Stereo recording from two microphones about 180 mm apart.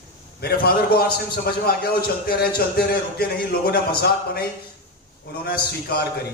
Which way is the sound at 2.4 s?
60° left (ahead or behind).